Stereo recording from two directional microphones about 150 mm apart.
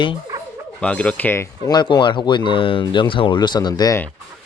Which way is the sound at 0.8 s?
10° left (ahead or behind).